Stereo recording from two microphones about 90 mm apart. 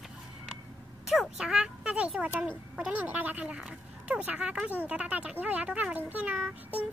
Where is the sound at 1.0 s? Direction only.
5° right (ahead or behind).